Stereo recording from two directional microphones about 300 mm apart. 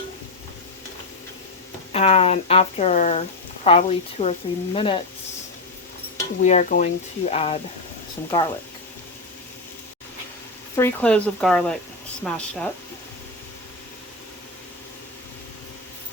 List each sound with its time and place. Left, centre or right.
1.9 s speech: centre
6.4 s speech: left
10.8 s speech: centre